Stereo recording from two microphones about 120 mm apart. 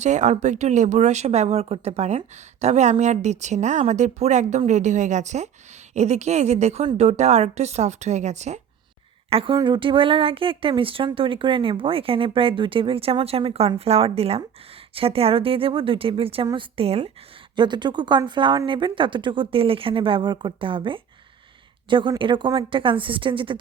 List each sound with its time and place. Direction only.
0.0 s speech: 75° right (ahead or behind)
9.3 s speech: 50° right (ahead or behind)
17.6 s a woman's voice: 40° right (ahead or behind)